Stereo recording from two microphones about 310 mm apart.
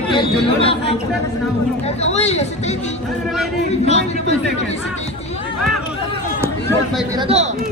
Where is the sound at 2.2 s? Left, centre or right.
Left.